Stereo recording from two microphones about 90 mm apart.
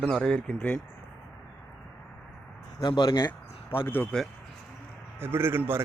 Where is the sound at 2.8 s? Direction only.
55° left (ahead or behind).